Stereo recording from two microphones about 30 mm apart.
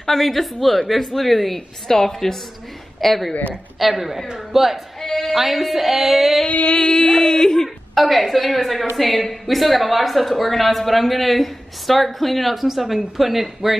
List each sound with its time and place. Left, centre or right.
0.0 s a woman's voice: centre
1.9 s a woman's voice: centre
3.0 s a woman's voice: centre
3.8 s a woman's voice: centre
5.0 s music: centre
5.3 s a woman's voice: centre
6.9 s a sound: centre
7.9 s a woman's voice: centre